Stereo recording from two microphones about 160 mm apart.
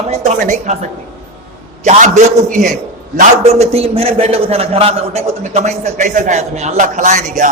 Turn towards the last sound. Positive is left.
turn(degrees=-50)  # may be behind; listen again after turning